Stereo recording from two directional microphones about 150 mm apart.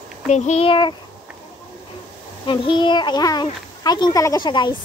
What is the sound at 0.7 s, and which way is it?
Speech, 30° left (ahead or behind).